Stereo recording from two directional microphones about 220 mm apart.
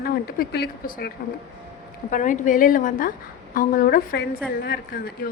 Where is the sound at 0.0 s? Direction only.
45° left (ahead or behind).